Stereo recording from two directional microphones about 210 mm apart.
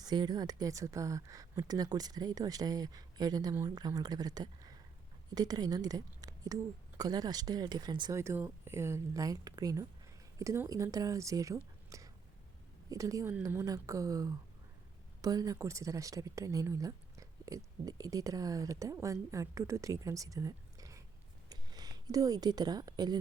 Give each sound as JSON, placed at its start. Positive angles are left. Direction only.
{"t": 0.0, "sound": "speech", "side_deg": -20}